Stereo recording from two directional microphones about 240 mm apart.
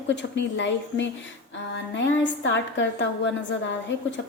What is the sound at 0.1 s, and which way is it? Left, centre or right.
A woman's voice, left.